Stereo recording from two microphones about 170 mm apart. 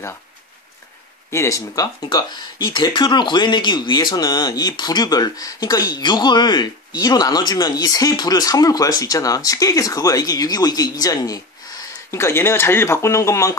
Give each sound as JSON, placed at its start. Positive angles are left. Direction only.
{"t": 1.3, "sound": "speech", "side_deg": 15}